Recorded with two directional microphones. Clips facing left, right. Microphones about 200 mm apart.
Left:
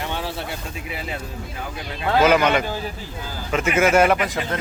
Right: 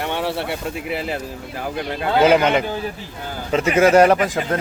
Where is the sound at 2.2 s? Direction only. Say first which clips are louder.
Right 2 dB; 30° right (ahead or behind).